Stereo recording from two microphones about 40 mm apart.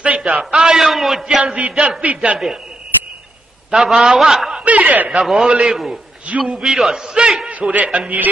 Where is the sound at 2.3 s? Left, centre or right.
Centre.